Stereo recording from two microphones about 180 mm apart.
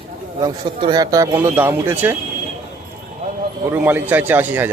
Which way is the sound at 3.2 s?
45° right (ahead or behind).